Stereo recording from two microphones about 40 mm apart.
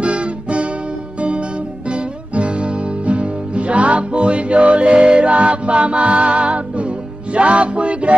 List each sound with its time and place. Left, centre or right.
0.0 s guitar: right
1.9 s music: right